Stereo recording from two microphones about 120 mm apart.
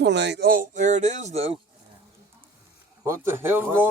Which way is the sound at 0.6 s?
90° right.